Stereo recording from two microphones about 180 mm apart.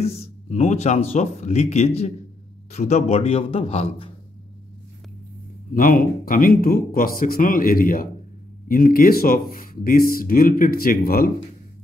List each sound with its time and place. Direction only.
0.0 s speech: 35° left (ahead or behind)
5.8 s speech: 50° left (ahead or behind)